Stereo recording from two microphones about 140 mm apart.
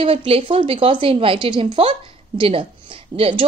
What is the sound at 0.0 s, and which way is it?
A woman's voice, 45° right (ahead or behind).